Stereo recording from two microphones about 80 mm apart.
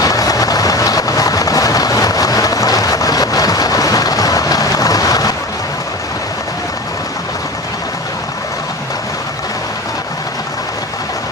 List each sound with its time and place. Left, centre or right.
0.0 s vehicle: left